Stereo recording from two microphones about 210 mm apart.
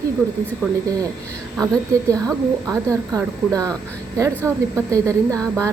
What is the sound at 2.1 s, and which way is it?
A woman's voice, 15° right (ahead or behind).